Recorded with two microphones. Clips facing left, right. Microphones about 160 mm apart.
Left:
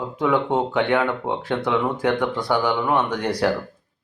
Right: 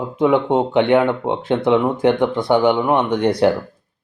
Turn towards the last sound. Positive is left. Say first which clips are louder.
# right 6 dB
turn(degrees=-25)  # may be behind; listen again after turning